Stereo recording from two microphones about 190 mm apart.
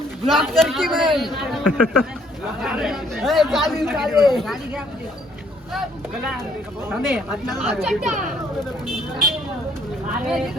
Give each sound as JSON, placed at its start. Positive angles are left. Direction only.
{"t": 0.3, "sound": "a man's voice", "side_deg": 0}
{"t": 6.9, "sound": "a man's voice", "side_deg": 0}
{"t": 10.2, "sound": "a man's voice", "side_deg": 0}